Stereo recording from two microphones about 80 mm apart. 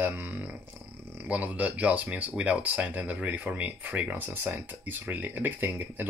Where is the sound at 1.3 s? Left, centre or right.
Centre.